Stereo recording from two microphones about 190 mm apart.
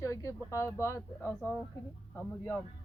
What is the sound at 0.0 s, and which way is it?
Speech, 15° left (ahead or behind).